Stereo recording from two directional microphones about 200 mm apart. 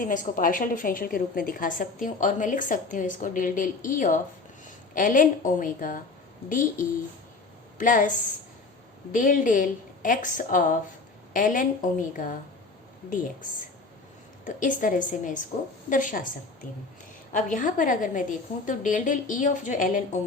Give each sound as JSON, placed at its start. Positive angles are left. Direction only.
{"t": 0.0, "sound": "a woman's voice", "side_deg": 40}
{"t": 14.4, "sound": "a woman's voice", "side_deg": 40}
{"t": 17.3, "sound": "a woman's voice", "side_deg": 40}